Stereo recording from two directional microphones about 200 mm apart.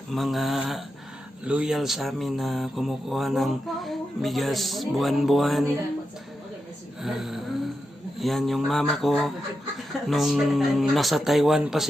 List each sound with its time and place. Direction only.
0.1 s speech: centre (ahead or behind)
7.0 s speech: centre (ahead or behind)